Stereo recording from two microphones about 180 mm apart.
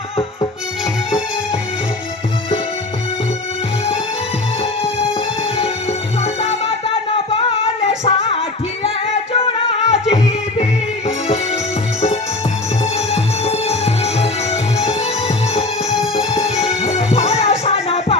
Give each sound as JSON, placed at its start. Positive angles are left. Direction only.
{"t": 6.2, "sound": "music", "side_deg": 35}
{"t": 12.8, "sound": "music", "side_deg": 35}